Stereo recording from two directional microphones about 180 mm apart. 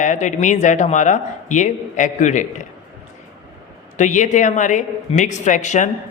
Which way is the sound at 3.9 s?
45° left (ahead or behind).